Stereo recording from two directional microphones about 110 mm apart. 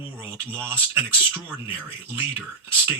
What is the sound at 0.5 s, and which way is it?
Speech, 20° right (ahead or behind).